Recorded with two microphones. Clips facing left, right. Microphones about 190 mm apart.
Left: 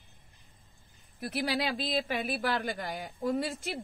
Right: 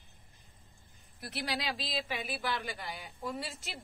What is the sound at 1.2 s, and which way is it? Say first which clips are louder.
Speech: left 6 dB; 55° left (ahead or behind).